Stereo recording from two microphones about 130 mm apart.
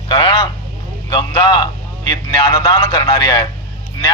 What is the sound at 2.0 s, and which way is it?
A man's voice, 30° left (ahead or behind).